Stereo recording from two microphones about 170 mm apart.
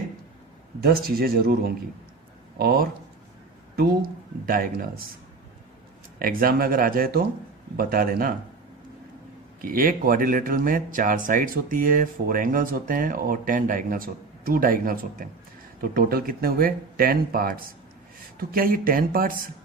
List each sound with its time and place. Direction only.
0.8 s speech: 65° right (ahead or behind)
4.4 s speech: 55° right (ahead or behind)
6.1 s speech: 60° right (ahead or behind)
9.6 s speech: 55° right (ahead or behind)